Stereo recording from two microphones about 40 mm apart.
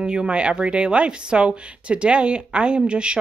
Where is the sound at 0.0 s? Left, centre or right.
Right.